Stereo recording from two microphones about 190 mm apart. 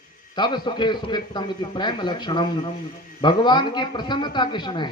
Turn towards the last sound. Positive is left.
turn(degrees=25)  # may be behind; listen again after turning